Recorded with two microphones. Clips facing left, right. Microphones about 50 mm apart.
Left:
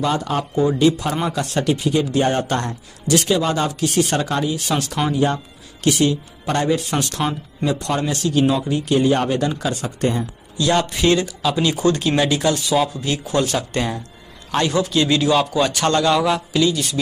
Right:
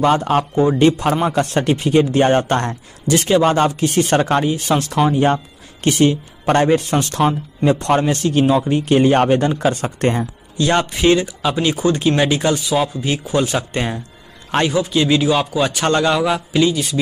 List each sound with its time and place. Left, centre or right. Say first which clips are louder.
0.0 s speech: right 6 dB; right
10.6 s speech: right 2 dB; right
12.6 s speech: even; centre
13.0 s speech: right 2 dB; centre
14.7 s speech: right 1 dB; centre
15.9 s speech: right 2 dB; right
16.2 s speech: right 1 dB; centre